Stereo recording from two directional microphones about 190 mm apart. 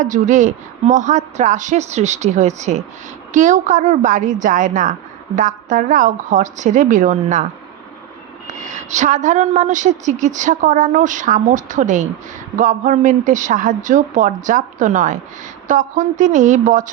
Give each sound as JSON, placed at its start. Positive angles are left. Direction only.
{"t": 0.0, "sound": "a woman's voice", "side_deg": -40}
{"t": 8.6, "sound": "a woman's voice", "side_deg": -40}